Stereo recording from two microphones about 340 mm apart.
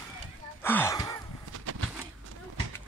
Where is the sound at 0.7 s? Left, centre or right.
Centre.